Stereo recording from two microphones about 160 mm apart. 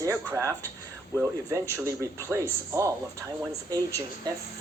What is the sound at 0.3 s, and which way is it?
Speech, 15° right (ahead or behind).